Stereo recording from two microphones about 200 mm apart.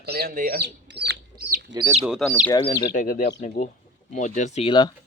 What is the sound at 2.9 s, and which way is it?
Speech, 40° left (ahead or behind).